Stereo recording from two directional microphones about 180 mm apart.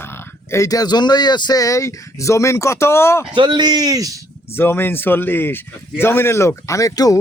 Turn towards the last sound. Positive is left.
turn(degrees=20)  # may be behind; listen again after turning